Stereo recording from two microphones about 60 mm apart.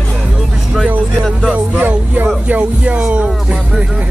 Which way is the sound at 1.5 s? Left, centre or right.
Right.